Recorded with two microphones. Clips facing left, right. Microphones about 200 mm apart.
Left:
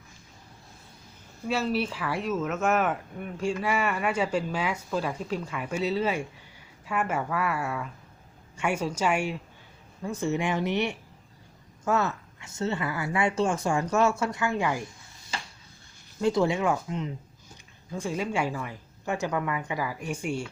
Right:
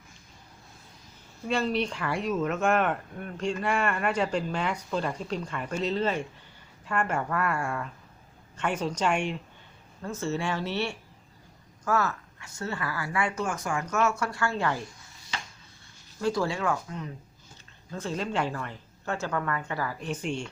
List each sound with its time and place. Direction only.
1.5 s a woman's voice: 5° left (ahead or behind)
16.2 s speech: 20° left (ahead or behind)
17.9 s a woman's voice: 10° left (ahead or behind)